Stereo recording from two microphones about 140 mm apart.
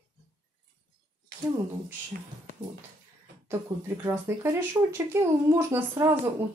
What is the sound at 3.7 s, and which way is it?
Speech, 30° right (ahead or behind).